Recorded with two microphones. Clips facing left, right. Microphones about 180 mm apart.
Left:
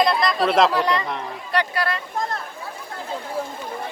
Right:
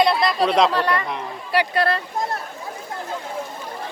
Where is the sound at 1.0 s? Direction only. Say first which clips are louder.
Even; centre (ahead or behind).